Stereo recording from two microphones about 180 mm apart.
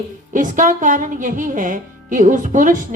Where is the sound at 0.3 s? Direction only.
45° right (ahead or behind).